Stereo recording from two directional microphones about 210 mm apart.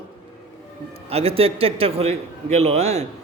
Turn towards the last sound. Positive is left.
turn(degrees=-30)  # may be behind; listen again after turning